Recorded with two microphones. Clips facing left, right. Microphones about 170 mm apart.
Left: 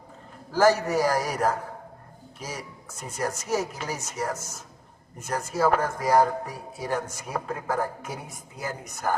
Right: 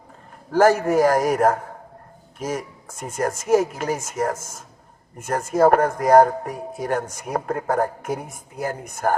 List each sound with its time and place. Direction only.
0.5 s speech: 50° right (ahead or behind)